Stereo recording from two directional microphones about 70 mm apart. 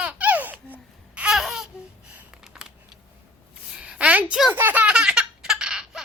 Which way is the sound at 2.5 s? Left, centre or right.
Centre.